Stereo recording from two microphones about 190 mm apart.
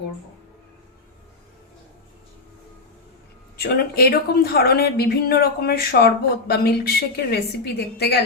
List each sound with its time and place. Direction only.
3.6 s a woman's voice: 55° left (ahead or behind)